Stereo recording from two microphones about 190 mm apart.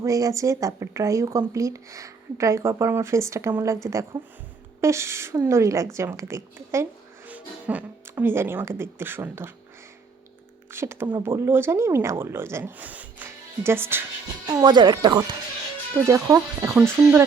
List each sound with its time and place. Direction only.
0.0 s speech: 15° right (ahead or behind)
10.7 s speech: 15° right (ahead or behind)